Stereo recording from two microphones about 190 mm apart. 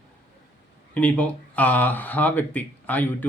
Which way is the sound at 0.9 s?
5° left (ahead or behind).